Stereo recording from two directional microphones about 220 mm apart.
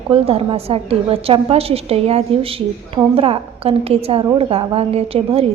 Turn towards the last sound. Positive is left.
turn(degrees=-25)  # may be behind; listen again after turning